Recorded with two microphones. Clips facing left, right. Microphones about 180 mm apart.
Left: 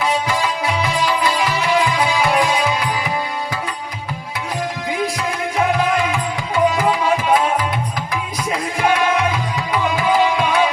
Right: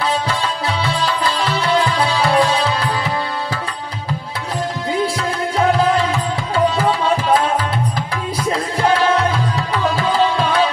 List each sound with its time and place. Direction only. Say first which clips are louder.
0.8 s music: left 1 dB; 10° left (ahead or behind)
2.1 s music: right 3 dB; 30° right (ahead or behind)
8.9 s music: right 3 dB; 30° right (ahead or behind)
9.9 s music: left 1 dB; 10° left (ahead or behind)